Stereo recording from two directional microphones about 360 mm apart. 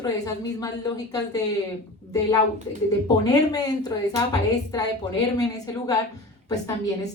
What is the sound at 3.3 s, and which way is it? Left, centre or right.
A woman's voice, centre.